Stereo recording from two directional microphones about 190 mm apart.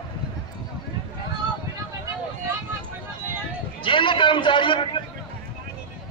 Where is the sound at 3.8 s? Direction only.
25° left (ahead or behind).